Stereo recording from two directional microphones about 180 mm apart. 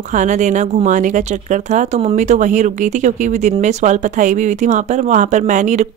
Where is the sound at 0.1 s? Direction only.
40° right (ahead or behind).